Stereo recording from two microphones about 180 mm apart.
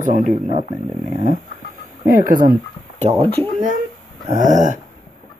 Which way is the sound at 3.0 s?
35° right (ahead or behind).